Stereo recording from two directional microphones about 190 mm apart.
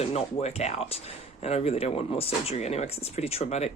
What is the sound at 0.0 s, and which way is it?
Speech, 35° left (ahead or behind).